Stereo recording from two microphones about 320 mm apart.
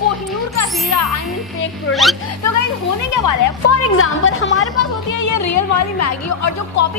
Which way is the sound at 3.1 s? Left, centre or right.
Left.